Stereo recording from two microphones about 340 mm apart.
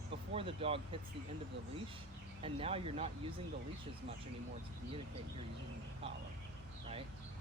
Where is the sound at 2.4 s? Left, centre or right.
Centre.